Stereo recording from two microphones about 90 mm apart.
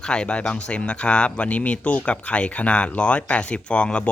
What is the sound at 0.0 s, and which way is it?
Speech, 10° left (ahead or behind).